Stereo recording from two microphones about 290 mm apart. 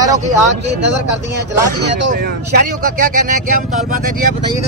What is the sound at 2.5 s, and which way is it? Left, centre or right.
Speech, right.